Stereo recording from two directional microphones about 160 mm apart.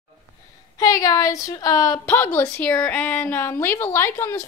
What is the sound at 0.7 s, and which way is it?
Speech, 20° left (ahead or behind).